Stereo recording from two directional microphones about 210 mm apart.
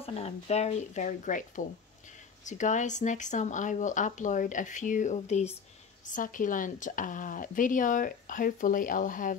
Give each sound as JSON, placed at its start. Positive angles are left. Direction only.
{"t": 0.0, "sound": "speech", "side_deg": 30}